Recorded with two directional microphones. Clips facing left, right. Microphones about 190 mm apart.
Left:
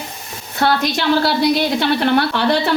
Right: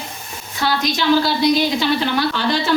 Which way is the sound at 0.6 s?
60° left (ahead or behind).